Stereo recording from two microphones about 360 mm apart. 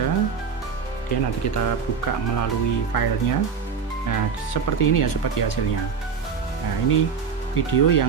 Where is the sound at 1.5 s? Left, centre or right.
Left.